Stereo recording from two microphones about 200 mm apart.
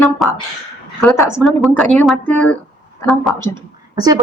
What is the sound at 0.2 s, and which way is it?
Speech, centre (ahead or behind).